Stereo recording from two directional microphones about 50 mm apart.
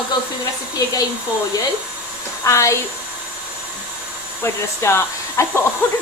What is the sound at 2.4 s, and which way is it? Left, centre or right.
Speech, left.